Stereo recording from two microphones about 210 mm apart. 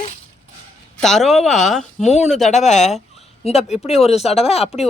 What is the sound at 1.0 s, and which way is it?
Speech, centre (ahead or behind).